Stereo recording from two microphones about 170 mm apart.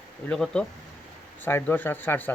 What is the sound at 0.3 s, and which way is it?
Speech, 5° left (ahead or behind).